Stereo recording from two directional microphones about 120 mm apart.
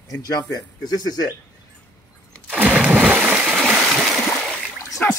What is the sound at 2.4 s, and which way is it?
Splash, 10° right (ahead or behind).